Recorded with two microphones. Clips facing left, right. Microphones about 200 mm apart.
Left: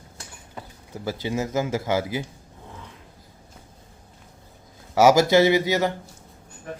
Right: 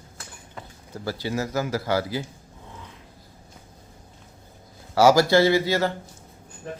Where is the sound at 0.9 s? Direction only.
20° left (ahead or behind).